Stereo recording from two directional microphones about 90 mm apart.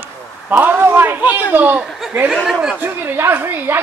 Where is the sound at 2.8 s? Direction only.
25° right (ahead or behind).